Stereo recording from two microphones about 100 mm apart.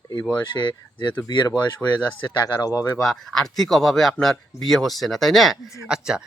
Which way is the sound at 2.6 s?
35° left (ahead or behind).